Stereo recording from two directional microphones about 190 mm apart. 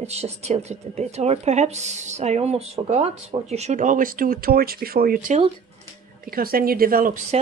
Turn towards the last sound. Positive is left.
turn(degrees=-45)  # may be behind; listen again after turning